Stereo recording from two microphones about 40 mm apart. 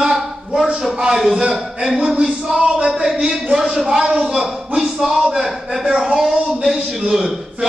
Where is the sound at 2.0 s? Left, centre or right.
Centre.